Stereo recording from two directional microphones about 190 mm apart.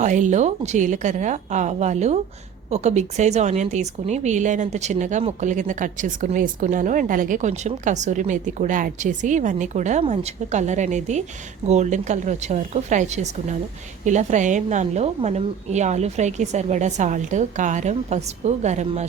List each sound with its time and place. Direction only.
0.0 s speech: 40° right (ahead or behind)